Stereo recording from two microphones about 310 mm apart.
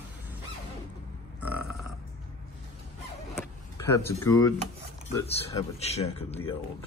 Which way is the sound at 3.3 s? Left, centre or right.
Centre.